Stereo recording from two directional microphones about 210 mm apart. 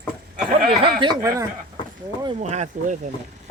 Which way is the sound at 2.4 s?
30° right (ahead or behind).